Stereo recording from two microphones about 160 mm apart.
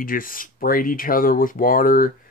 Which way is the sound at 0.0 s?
60° left (ahead or behind).